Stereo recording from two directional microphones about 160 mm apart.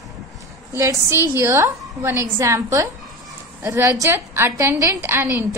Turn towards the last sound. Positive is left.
turn(degrees=-15)  # may be behind; listen again after turning